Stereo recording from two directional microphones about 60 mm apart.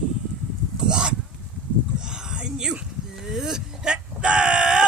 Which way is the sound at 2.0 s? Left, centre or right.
Centre.